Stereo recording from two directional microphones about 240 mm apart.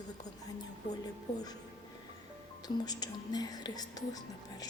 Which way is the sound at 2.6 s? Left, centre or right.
Centre.